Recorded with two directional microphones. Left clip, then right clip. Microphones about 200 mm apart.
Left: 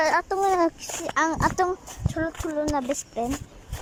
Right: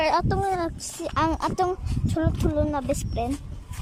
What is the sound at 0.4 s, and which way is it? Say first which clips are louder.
A woman's voice: left 5 dB; centre (ahead or behind).